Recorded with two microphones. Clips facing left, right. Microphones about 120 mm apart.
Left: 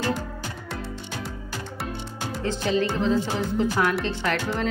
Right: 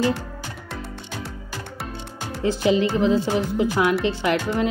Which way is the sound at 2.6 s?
15° right (ahead or behind).